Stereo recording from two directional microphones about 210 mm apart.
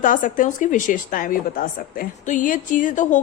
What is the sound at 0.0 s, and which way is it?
A woman's voice, 40° left (ahead or behind).